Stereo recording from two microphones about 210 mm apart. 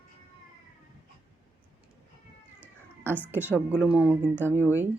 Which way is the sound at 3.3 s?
5° right (ahead or behind).